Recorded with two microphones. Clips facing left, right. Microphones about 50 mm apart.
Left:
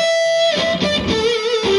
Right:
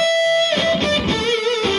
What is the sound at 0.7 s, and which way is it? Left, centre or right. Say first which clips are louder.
Music: even; centre.